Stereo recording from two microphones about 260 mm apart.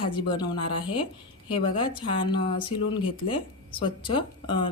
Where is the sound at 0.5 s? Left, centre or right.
Left.